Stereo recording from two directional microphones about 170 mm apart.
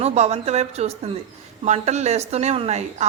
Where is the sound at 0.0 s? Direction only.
40° right (ahead or behind).